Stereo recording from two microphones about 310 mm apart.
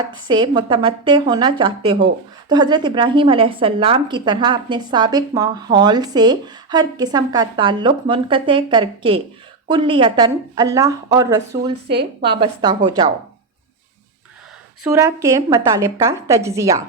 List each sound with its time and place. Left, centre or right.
0.3 s a woman's voice: centre
11.9 s a woman's voice: right
12.4 s a woman's voice: centre
14.8 s a woman's voice: centre